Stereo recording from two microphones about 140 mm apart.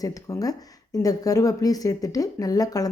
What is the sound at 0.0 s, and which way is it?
Speech, 25° left (ahead or behind).